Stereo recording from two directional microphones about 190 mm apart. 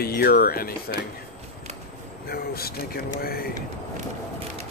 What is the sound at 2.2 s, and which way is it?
Speech, 55° left (ahead or behind).